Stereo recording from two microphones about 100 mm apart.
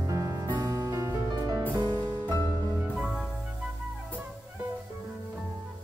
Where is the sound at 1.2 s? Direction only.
40° right (ahead or behind).